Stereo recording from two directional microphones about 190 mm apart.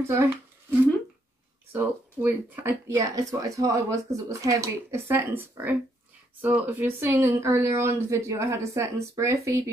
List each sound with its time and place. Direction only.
0.1 s speech: 15° right (ahead or behind)
1.7 s speech: 10° right (ahead or behind)